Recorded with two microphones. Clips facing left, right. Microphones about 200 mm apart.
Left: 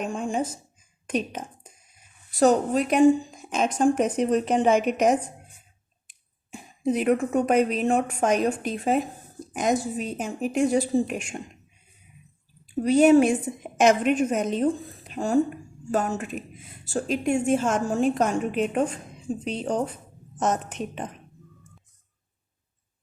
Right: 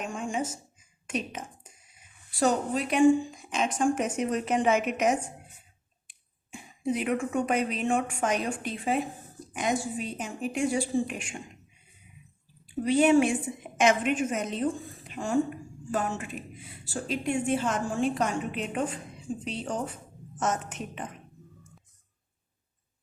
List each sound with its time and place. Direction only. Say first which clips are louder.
1.0 s a woman's voice: left 5 dB; 35° left (ahead or behind)
12.8 s a woman's voice: left 5 dB; 40° left (ahead or behind)